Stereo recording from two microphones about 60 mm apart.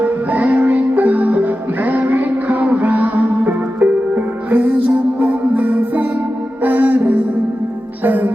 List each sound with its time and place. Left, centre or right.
0.0 s music: right